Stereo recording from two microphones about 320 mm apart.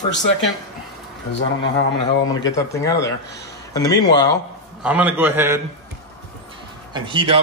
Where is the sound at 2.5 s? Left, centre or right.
Centre.